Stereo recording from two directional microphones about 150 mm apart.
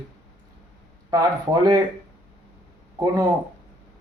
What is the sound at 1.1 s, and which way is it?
Speech, 25° right (ahead or behind).